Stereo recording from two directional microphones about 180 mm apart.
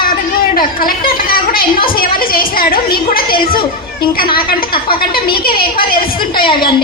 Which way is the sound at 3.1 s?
55° left (ahead or behind).